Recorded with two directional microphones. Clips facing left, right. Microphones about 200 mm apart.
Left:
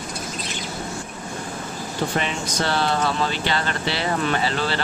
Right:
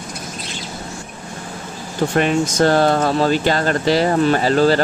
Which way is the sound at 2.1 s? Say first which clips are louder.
Right 9 dB; 50° right (ahead or behind).